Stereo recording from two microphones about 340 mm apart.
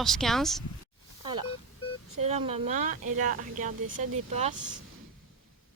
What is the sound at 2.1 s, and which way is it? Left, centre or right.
Speech, centre.